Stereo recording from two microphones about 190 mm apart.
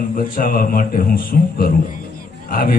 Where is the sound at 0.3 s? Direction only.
50° left (ahead or behind).